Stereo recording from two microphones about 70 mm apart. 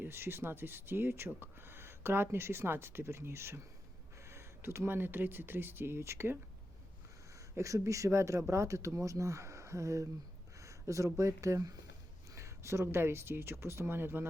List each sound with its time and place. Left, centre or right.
0.0 s speech: right
7.5 s speech: right
12.3 s speech: right